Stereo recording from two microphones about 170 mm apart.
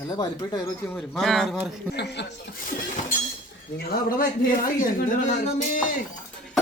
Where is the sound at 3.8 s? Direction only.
60° left (ahead or behind).